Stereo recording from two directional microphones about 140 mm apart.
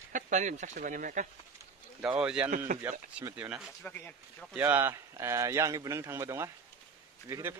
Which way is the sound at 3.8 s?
10° left (ahead or behind).